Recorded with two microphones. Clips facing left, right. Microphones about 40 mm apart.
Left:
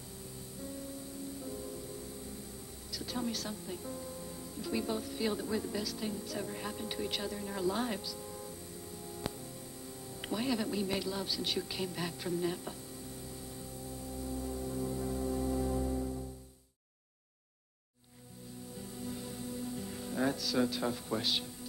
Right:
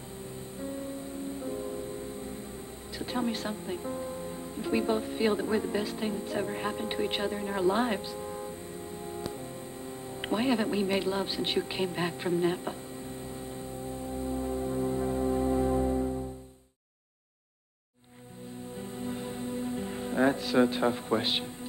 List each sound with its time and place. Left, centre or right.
0.6 s music: right
3.0 s speech: right
10.2 s speech: right
13.3 s music: right
18.8 s music: right